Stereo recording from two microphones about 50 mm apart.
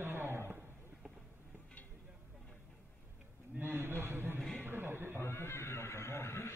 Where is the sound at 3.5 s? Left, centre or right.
Right.